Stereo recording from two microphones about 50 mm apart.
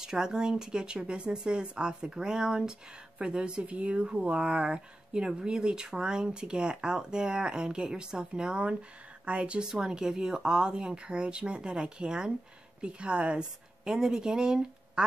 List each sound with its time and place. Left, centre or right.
0.0 s speech: centre